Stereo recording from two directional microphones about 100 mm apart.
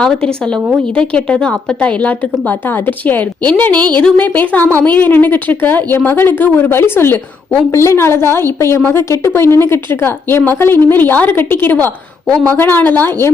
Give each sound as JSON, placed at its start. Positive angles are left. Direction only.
{"t": 0.0, "sound": "a woman's voice", "side_deg": 10}